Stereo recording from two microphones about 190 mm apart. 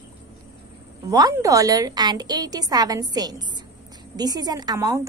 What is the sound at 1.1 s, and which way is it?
A woman's voice, 20° right (ahead or behind).